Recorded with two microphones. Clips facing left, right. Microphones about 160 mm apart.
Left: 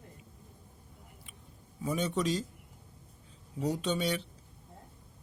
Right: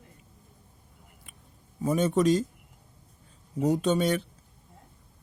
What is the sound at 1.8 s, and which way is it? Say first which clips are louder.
Speech: right 8 dB; 45° right (ahead or behind).